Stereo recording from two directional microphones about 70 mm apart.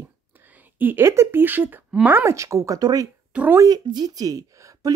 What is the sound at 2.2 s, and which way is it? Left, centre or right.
Speech, right.